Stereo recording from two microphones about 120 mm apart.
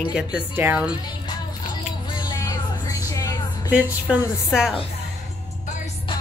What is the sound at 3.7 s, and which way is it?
Speech, 5° right (ahead or behind).